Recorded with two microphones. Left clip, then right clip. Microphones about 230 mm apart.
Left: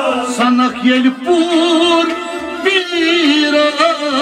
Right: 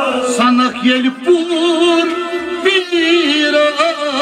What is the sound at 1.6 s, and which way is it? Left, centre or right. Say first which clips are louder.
Music: left 1 dB; right.